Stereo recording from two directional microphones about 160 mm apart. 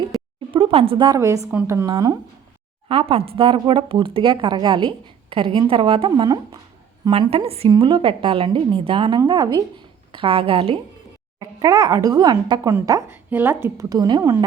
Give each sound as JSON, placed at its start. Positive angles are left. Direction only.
{"t": 0.5, "sound": "a woman's voice", "side_deg": -35}
{"t": 2.9, "sound": "a woman's voice", "side_deg": -35}
{"t": 11.3, "sound": "a woman's voice", "side_deg": -20}